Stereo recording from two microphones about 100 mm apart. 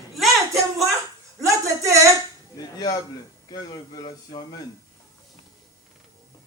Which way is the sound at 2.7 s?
40° left (ahead or behind).